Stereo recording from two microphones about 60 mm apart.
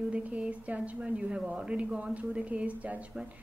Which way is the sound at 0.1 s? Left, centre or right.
Right.